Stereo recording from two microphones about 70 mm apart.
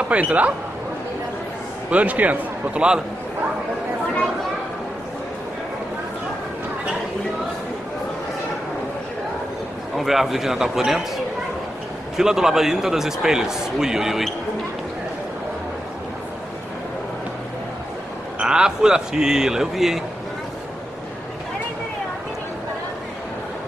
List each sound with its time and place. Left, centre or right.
0.1 s a man's voice: centre
1.9 s a man's voice: right
9.9 s speech: centre
12.2 s a man's voice: centre
18.4 s a man's voice: centre